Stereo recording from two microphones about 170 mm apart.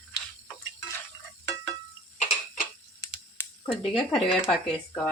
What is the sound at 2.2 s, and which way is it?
Tick-tock, 50° left (ahead or behind).